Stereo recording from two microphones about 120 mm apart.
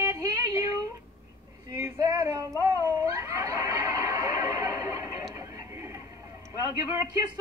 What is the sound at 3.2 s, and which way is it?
Chatter, 30° right (ahead or behind).